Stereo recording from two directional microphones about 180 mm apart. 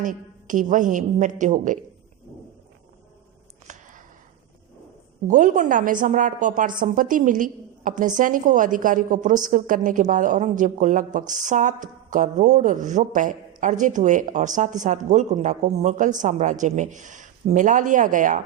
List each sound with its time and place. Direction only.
0.0 s speech: 45° right (ahead or behind)
3.7 s a sound: 45° right (ahead or behind)
5.3 s speech: 45° right (ahead or behind)